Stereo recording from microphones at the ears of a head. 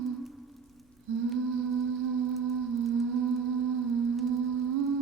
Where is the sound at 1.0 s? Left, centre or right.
Right.